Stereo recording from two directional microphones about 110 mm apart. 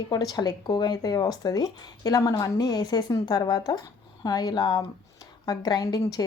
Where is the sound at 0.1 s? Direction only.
35° left (ahead or behind).